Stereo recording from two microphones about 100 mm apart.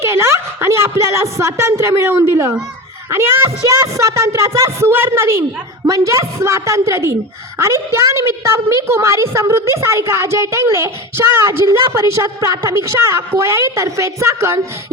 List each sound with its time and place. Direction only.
0.0 s a woman's voice: 25° right (ahead or behind)